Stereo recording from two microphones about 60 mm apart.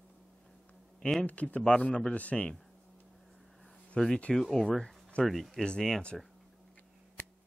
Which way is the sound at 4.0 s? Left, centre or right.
Centre.